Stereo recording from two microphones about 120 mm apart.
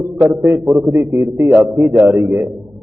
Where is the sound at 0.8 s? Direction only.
25° right (ahead or behind).